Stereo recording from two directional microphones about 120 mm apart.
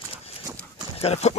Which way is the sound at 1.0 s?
60° left (ahead or behind).